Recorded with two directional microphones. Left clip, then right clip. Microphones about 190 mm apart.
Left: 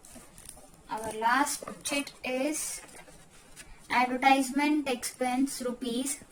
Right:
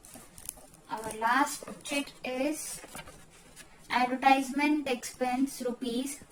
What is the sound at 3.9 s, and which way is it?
A woman's voice, 15° left (ahead or behind).